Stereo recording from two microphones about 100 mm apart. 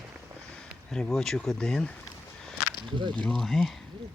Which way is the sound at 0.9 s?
5° left (ahead or behind).